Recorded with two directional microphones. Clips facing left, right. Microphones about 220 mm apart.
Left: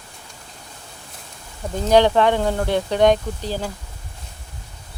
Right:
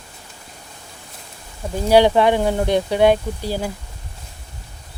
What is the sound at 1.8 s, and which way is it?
Speech, 10° right (ahead or behind).